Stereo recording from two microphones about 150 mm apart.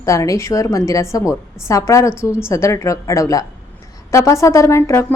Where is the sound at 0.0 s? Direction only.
20° left (ahead or behind).